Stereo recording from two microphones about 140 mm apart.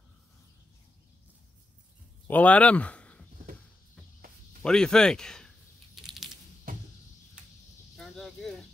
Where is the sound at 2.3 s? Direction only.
10° left (ahead or behind).